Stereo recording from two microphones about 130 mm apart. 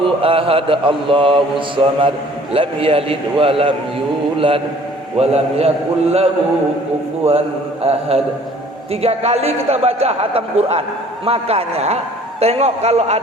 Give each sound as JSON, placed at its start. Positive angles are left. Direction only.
{"t": 0.2, "sound": "mantra", "side_deg": -45}
{"t": 4.4, "sound": "a man's voice", "side_deg": -45}
{"t": 5.1, "sound": "mantra", "side_deg": -50}
{"t": 7.3, "sound": "mantra", "side_deg": -50}